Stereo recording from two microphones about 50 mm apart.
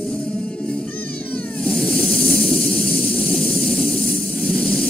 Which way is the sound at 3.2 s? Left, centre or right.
Centre.